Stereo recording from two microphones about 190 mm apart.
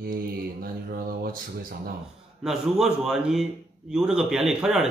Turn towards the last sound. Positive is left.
turn(degrees=-5)  # may be behind; listen again after turning